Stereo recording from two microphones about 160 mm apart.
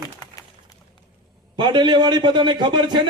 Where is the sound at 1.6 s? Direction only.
30° right (ahead or behind).